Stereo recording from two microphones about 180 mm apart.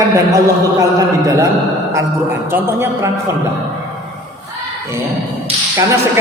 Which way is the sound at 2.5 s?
10° right (ahead or behind).